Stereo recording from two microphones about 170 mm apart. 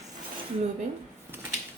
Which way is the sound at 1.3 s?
10° right (ahead or behind).